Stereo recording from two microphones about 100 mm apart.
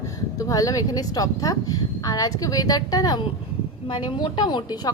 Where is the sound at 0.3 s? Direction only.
35° left (ahead or behind).